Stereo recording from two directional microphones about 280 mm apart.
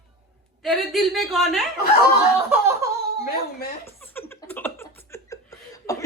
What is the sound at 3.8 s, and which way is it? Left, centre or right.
Chuckle, centre.